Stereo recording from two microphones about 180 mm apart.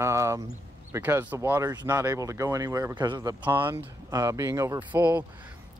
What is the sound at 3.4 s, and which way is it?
Speech, 10° right (ahead or behind).